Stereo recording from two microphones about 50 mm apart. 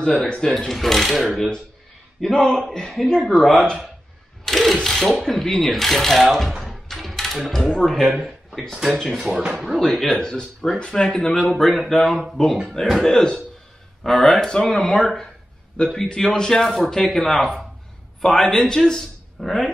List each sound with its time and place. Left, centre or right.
0.0 s speech: centre
2.3 s speech: centre
6.6 s a sound: centre
7.3 s speech: centre
8.2 s a sound: centre
8.9 s speech: centre
13.1 s speech: centre